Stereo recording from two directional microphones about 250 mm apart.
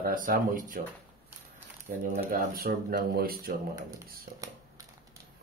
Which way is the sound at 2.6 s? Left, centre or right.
Right.